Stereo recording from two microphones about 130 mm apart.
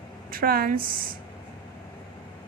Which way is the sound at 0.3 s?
90° right.